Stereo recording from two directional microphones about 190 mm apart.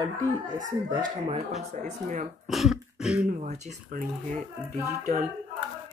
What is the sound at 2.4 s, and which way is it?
Throat clearing, centre (ahead or behind).